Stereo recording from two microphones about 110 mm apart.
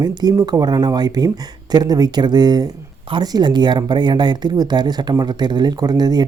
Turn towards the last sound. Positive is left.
turn(degrees=-40)  # may be behind; listen again after turning